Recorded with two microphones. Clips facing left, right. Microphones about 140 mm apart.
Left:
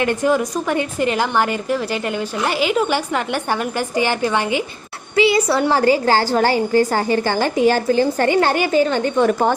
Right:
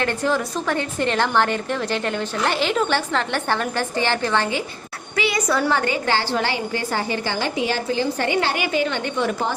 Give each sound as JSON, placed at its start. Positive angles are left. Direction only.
{"t": 0.0, "sound": "a woman's voice", "side_deg": 15}
{"t": 5.1, "sound": "a woman's voice", "side_deg": 25}